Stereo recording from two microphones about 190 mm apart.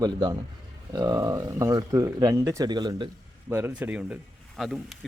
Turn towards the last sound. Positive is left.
turn(degrees=0)  # may be behind; listen again after turning